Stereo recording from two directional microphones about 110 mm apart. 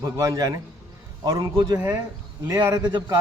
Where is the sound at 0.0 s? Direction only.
30° right (ahead or behind).